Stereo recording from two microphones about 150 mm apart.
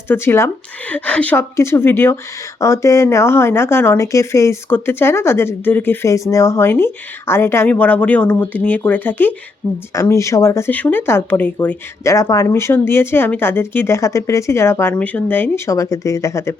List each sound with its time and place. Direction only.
0.1 s speech: 15° left (ahead or behind)